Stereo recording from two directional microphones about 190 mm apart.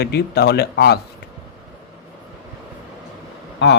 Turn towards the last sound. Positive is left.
turn(degrees=65)  # may be behind; listen again after turning